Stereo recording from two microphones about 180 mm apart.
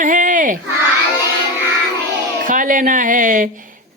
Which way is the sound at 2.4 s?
50° right (ahead or behind).